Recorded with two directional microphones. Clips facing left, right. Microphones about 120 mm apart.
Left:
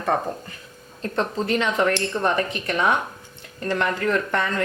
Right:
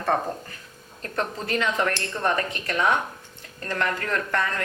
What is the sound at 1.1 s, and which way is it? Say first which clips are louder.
Speech: left 4 dB; 25° left (ahead or behind).